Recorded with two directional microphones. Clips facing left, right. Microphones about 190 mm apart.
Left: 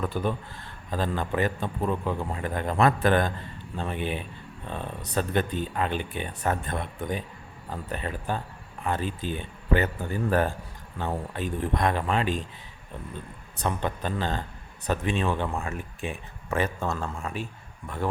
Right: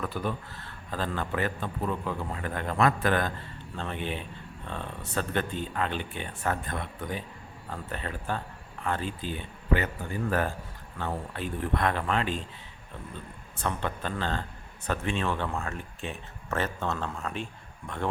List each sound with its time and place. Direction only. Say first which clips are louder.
0.0 s a man's voice: left 4 dB; 25° left (ahead or behind)
0.9 s a man's voice: left 3 dB; 15° left (ahead or behind)
3.8 s speech: left 3 dB; 15° left (ahead or behind)
11.0 s speech: left 3 dB; 20° left (ahead or behind)
13.6 s speech: left 3 dB; 15° left (ahead or behind)